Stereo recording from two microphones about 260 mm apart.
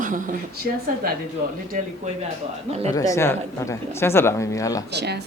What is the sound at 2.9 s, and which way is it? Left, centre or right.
Speech, centre.